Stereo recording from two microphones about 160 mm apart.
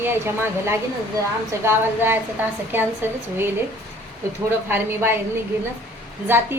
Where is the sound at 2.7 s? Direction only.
15° right (ahead or behind).